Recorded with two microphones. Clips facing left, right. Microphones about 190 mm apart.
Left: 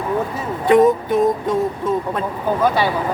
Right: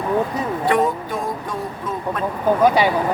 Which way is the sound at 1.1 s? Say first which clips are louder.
Left 9 dB; 25° left (ahead or behind).